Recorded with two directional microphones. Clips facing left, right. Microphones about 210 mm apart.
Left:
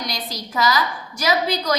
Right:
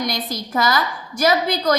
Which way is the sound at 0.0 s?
50° right (ahead or behind).